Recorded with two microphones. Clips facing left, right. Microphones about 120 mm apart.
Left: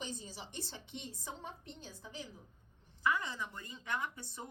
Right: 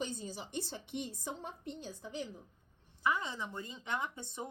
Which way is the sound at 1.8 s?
60° right (ahead or behind).